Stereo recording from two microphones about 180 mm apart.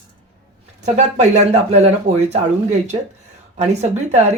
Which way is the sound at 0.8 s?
40° right (ahead or behind).